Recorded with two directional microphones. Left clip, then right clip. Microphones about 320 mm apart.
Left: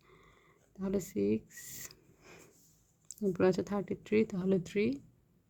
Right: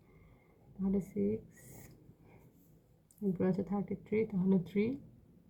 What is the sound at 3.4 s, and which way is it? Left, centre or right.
Speech, left.